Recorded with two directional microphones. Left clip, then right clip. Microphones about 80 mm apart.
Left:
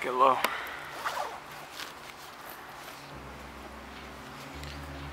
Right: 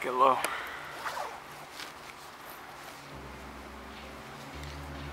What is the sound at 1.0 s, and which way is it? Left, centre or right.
Zipper, left.